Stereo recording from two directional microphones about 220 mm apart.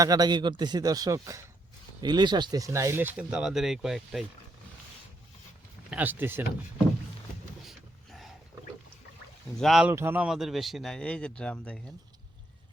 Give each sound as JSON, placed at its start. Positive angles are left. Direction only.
{"t": 0.0, "sound": "speech", "side_deg": -15}
{"t": 5.9, "sound": "speech", "side_deg": -10}
{"t": 7.6, "sound": "a sound", "side_deg": 0}
{"t": 9.6, "sound": "speech", "side_deg": 0}
{"t": 9.9, "sound": "speech", "side_deg": -10}